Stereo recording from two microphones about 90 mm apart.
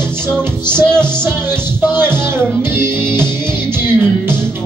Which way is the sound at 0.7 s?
10° left (ahead or behind).